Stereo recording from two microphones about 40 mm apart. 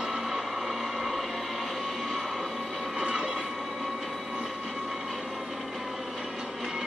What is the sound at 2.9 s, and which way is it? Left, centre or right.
Vehicle, centre.